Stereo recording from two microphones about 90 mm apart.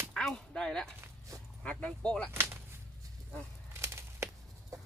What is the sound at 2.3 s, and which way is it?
Speech, 30° right (ahead or behind).